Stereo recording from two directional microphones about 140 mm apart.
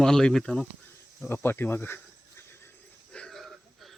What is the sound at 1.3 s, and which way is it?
Speech, 15° left (ahead or behind).